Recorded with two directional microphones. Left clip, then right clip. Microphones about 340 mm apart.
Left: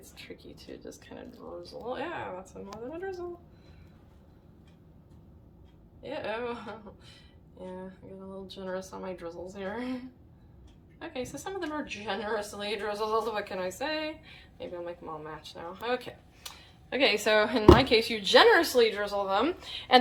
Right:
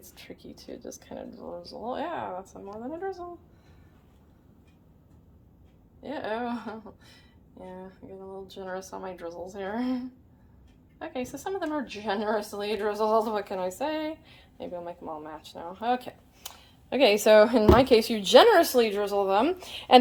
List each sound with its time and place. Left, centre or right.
0.9 s a woman's voice: right
6.1 s a woman's voice: right
8.5 s a woman's voice: right
11.0 s a woman's voice: right